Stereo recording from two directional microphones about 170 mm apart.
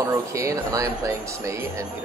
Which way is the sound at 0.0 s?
20° right (ahead or behind).